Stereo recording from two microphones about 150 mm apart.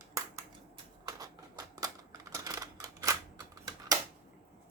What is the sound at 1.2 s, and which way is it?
Typewriter, 25° right (ahead or behind).